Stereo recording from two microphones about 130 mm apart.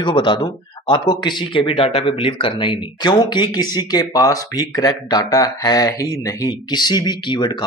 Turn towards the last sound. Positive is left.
turn(degrees=35)  # may be behind; listen again after turning